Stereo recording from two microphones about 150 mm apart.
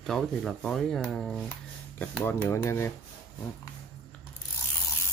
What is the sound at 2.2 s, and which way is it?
Speech, 15° left (ahead or behind).